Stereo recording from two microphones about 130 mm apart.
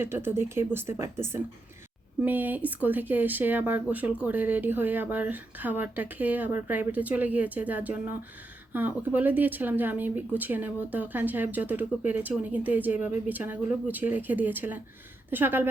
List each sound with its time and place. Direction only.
0.0 s speech: 15° right (ahead or behind)